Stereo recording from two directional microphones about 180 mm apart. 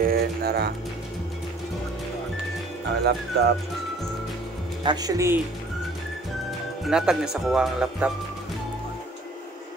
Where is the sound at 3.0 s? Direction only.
65° right (ahead or behind).